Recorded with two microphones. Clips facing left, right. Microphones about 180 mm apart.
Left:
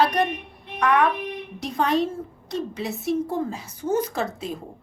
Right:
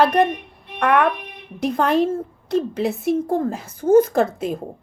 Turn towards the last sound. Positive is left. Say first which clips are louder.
# right 8 dB
turn(degrees=-50)  # may be behind; listen again after turning